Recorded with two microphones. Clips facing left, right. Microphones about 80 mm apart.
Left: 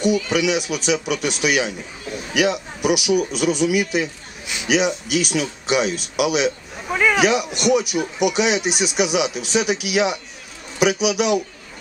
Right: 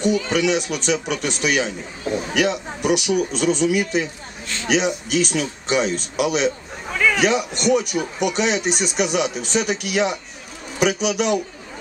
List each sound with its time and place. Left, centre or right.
0.0 s a man's voice: centre
6.9 s a sound: centre
7.2 s a man's voice: centre